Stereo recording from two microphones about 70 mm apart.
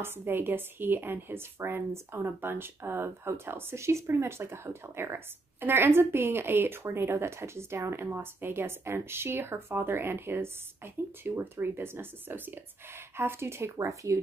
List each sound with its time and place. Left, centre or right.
0.0 s speech: right